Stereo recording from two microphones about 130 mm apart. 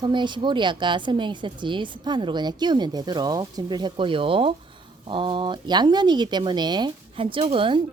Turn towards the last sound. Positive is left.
turn(degrees=-40)  # may be behind; listen again after turning